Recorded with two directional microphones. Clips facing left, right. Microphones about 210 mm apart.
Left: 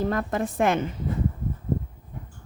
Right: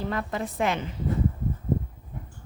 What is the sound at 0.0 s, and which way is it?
Speech, 45° left (ahead or behind).